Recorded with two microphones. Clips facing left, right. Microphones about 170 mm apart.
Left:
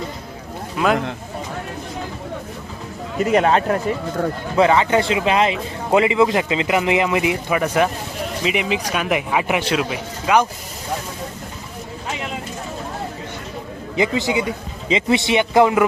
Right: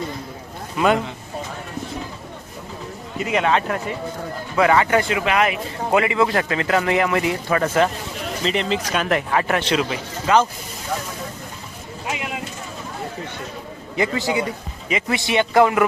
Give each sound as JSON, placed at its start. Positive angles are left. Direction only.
{"t": 0.8, "sound": "speech", "side_deg": 0}
{"t": 3.2, "sound": "a man's voice", "side_deg": 45}
{"t": 4.5, "sound": "speech", "side_deg": 25}
{"t": 13.9, "sound": "speech", "side_deg": 20}